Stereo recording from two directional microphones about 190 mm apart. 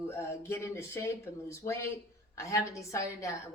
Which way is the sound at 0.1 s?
15° left (ahead or behind).